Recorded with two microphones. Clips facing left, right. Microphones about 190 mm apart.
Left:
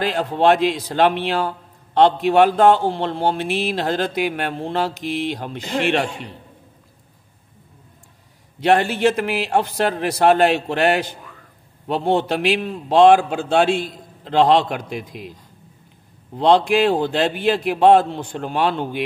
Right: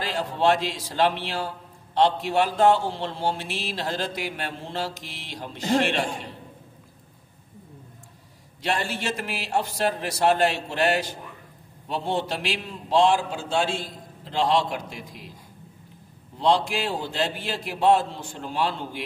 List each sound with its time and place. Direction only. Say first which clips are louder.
0.0 s a man's voice: left 6 dB; 60° left (ahead or behind)
8.5 s a man's voice: left 11 dB; 60° left (ahead or behind)
16.3 s a man's voice: left 8 dB; 60° left (ahead or behind)